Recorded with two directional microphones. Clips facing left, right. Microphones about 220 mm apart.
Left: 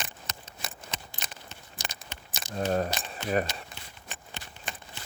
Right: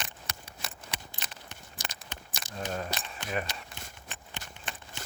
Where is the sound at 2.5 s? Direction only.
40° left (ahead or behind).